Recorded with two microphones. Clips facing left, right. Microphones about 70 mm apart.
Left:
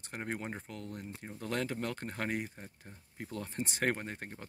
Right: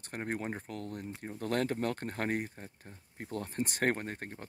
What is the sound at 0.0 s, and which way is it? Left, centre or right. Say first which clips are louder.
Speech: right 3 dB; right.